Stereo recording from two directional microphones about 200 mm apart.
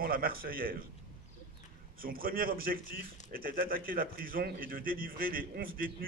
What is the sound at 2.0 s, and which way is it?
A man's voice, 45° right (ahead or behind).